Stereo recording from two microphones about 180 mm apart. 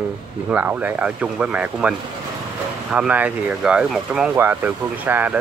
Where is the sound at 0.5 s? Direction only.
5° right (ahead or behind).